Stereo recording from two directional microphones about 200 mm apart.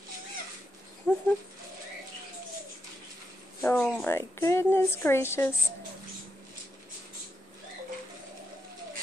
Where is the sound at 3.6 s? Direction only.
10° left (ahead or behind).